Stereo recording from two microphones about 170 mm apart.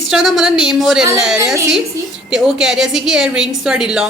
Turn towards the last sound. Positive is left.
turn(degrees=-5)  # may be behind; listen again after turning